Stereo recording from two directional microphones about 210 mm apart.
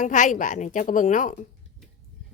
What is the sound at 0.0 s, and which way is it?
A woman's voice, 35° left (ahead or behind).